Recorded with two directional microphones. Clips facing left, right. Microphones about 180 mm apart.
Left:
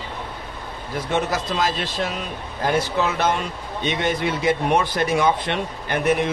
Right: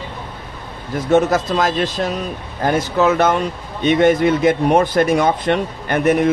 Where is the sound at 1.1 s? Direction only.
50° right (ahead or behind).